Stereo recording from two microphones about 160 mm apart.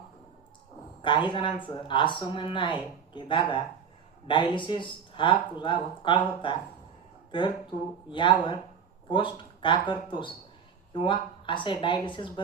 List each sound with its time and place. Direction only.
1.0 s speech: 30° left (ahead or behind)